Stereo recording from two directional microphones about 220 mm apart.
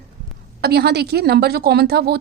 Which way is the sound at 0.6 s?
50° right (ahead or behind).